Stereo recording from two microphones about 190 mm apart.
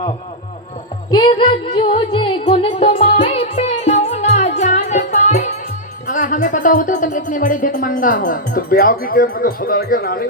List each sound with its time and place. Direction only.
1.1 s music: 25° left (ahead or behind); by 5.5 s 40° left (ahead or behind)
6.1 s speech: 45° left (ahead or behind)